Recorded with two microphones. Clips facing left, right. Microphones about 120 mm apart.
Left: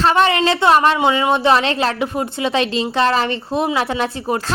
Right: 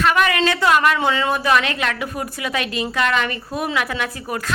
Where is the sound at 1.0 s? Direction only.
20° left (ahead or behind).